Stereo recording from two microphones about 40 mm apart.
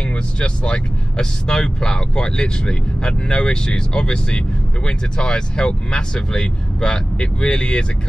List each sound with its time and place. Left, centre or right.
0.0 s speech: left